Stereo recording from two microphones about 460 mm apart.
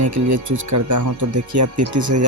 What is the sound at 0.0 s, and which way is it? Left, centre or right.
Speech, right.